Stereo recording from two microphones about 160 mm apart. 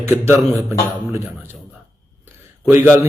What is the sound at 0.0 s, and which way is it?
Speech, 15° right (ahead or behind).